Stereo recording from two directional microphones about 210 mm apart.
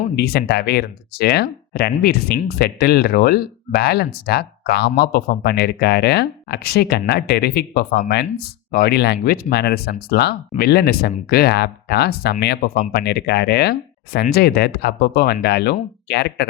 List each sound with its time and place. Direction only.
0.2 s speech: 50° left (ahead or behind)